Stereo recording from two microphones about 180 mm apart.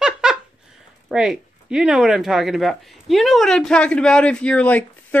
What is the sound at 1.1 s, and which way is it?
Speech, 5° right (ahead or behind).